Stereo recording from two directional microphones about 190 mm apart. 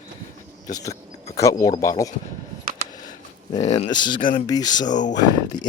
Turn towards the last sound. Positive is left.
turn(degrees=20)  # may be behind; listen again after turning